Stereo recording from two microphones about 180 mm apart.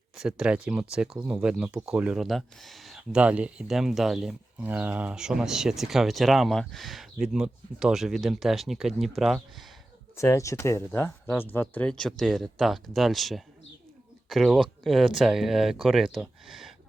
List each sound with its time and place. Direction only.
0.2 s speech: 5° right (ahead or behind)
10.2 s speech: 15° left (ahead or behind); by 16.7 s centre (ahead or behind)